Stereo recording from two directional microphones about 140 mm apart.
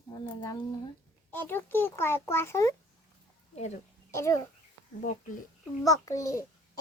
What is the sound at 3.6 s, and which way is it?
Speech, 55° left (ahead or behind).